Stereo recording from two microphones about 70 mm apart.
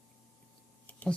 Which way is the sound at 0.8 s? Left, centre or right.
Left.